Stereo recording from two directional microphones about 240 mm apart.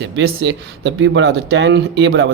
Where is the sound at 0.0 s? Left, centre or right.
Right.